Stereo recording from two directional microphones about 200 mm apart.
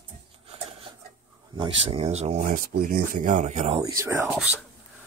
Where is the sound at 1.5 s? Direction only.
25° right (ahead or behind).